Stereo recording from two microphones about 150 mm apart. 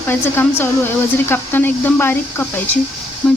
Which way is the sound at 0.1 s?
15° left (ahead or behind).